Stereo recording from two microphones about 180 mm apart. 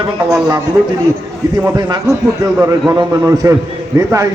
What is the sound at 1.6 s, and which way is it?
A man's voice, 20° right (ahead or behind).